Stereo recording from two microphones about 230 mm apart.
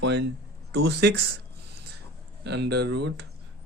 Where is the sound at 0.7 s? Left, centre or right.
Right.